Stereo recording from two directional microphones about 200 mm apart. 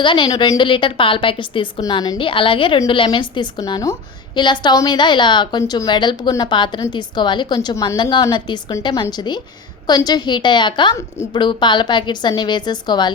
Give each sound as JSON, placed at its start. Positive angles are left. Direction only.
{"t": 0.0, "sound": "a woman's voice", "side_deg": 25}